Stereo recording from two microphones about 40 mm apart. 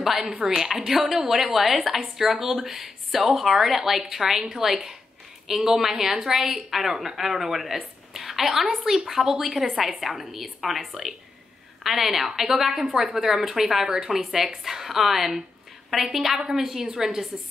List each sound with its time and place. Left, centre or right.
0.0 s a woman's voice: centre
0.3 s a woman's voice: right
0.6 s a woman's voice: centre